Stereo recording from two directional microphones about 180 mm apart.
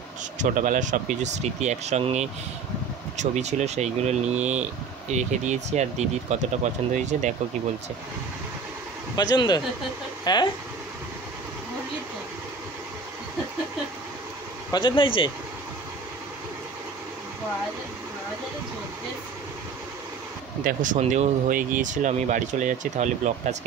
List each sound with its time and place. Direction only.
0.4 s speech: 45° right (ahead or behind)
9.1 s speech: 20° left (ahead or behind)
14.7 s speech: 25° left (ahead or behind)
20.6 s speech: 45° right (ahead or behind)